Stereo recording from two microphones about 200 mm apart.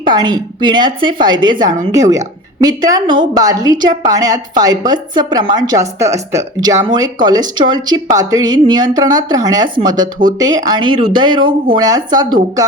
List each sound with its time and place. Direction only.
0.0 s a woman's voice: 20° right (ahead or behind)